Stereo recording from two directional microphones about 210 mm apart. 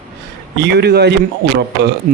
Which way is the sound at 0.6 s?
50° right (ahead or behind).